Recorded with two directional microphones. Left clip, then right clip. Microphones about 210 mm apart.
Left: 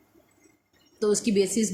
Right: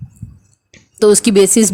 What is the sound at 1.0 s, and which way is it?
Speech, 40° right (ahead or behind).